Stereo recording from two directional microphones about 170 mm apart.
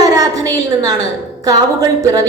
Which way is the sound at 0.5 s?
20° right (ahead or behind).